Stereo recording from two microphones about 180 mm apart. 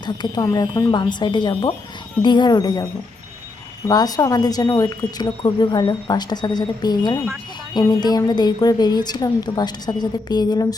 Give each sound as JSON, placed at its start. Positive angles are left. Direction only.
{"t": 0.0, "sound": "speech", "side_deg": 25}
{"t": 3.8, "sound": "speech", "side_deg": 20}